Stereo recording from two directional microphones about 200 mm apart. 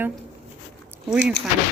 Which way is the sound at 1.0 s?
Centre (ahead or behind).